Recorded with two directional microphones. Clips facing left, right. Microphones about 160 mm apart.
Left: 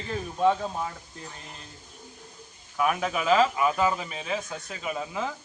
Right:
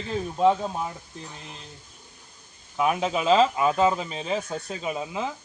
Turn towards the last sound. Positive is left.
turn(degrees=-15)  # may be behind; listen again after turning